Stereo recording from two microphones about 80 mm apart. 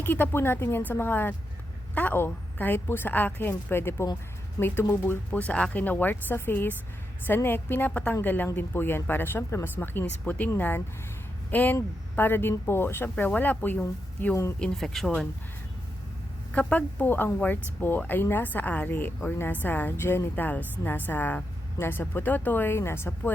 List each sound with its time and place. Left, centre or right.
0.0 s speech: left
14.6 s speech: centre
16.5 s speech: centre